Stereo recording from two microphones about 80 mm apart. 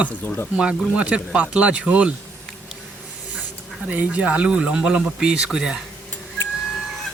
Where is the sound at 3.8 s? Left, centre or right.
Centre.